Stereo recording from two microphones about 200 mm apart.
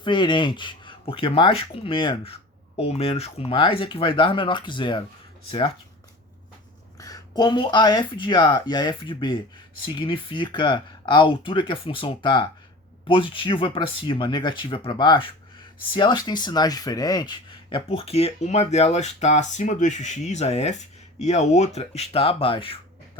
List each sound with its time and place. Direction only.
0.0 s speech: 25° left (ahead or behind)
7.0 s speech: 20° left (ahead or behind)